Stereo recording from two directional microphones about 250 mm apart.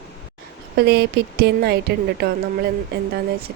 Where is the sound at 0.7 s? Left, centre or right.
Right.